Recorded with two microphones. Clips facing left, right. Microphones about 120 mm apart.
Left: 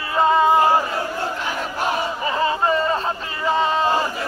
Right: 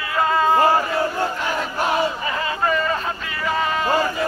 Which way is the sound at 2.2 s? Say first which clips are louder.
Left 3 dB; 30° left (ahead or behind).